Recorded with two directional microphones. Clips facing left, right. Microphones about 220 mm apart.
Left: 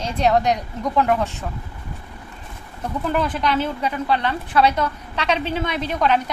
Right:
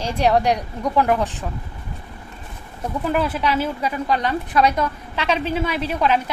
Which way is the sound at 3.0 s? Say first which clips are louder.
Right 1 dB; 5° right (ahead or behind).